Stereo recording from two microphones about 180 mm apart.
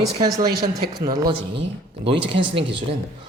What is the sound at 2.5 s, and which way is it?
Speech, 30° right (ahead or behind).